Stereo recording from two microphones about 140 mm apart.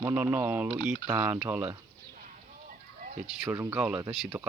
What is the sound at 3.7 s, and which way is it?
Speech, 10° right (ahead or behind).